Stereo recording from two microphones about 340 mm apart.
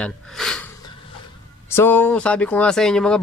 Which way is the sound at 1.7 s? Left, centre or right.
Centre.